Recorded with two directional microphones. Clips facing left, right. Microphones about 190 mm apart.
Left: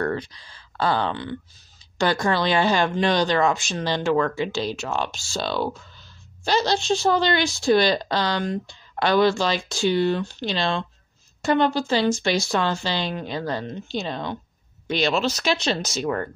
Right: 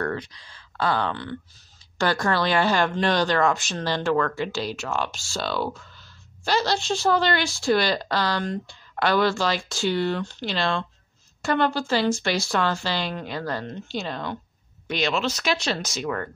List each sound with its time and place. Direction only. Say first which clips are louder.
0.0 s speech: left 3 dB; 30° left (ahead or behind)
2.0 s speech: left 1 dB; 15° left (ahead or behind)
14.9 s speech: left 3 dB; 30° left (ahead or behind)
15.5 s speech: left 2 dB; 25° left (ahead or behind)